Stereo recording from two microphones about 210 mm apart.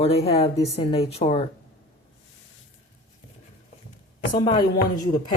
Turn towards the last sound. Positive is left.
turn(degrees=20)  # may be behind; listen again after turning